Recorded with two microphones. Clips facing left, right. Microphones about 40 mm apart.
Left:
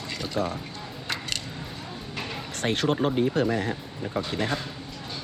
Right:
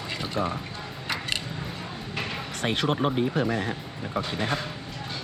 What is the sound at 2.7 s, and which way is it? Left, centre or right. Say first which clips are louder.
Speech: left 1 dB; right.